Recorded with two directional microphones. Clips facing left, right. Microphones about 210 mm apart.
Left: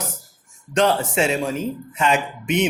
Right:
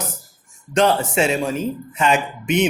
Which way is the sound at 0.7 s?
15° right (ahead or behind).